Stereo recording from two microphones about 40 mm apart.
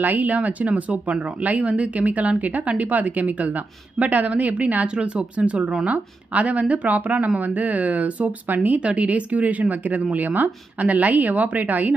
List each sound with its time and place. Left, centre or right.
0.0 s speech: right
4.8 s a woman's voice: right